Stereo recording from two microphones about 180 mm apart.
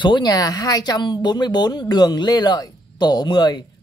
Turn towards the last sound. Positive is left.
turn(degrees=25)  # may be behind; listen again after turning